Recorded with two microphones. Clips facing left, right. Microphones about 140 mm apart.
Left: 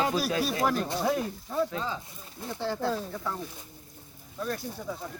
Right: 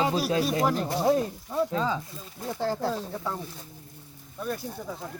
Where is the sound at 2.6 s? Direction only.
35° right (ahead or behind).